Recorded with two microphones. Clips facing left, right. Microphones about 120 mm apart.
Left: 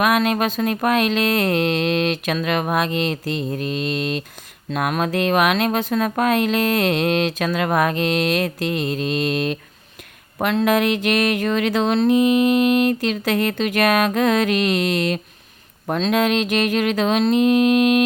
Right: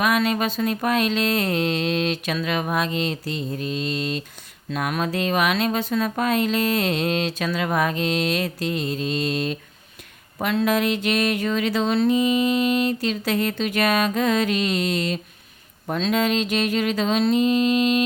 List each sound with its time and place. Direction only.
0.0 s speech: 55° left (ahead or behind)